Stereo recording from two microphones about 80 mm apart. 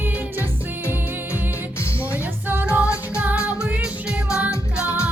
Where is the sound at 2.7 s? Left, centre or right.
Centre.